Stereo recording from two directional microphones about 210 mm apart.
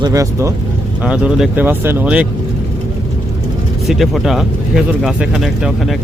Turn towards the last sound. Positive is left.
turn(degrees=0)  # may be behind; listen again after turning